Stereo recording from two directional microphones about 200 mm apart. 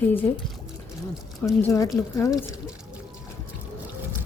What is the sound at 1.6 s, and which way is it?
Speech, 15° left (ahead or behind).